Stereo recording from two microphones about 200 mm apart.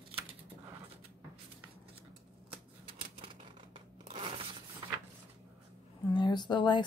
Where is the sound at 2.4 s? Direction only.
25° right (ahead or behind).